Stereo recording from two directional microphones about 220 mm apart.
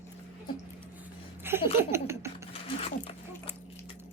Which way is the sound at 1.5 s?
10° right (ahead or behind).